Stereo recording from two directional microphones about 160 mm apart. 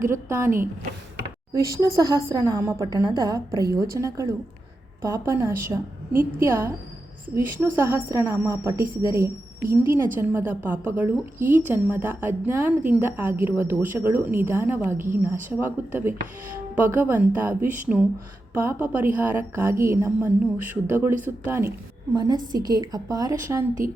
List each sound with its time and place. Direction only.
0.0 s a woman's voice: 15° right (ahead or behind)